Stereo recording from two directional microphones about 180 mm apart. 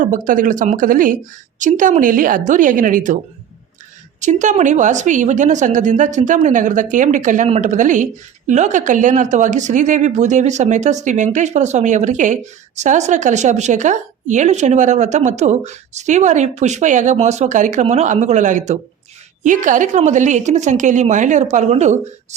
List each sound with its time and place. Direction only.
0.0 s a woman's voice: 45° right (ahead or behind)
4.2 s a woman's voice: 40° right (ahead or behind)